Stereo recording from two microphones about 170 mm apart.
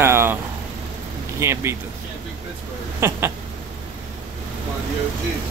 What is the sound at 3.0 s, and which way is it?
Speech, 15° right (ahead or behind).